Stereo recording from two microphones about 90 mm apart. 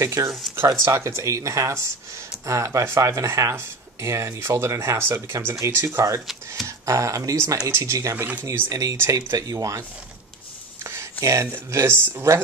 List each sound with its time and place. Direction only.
0.0 s speech: 35° right (ahead or behind)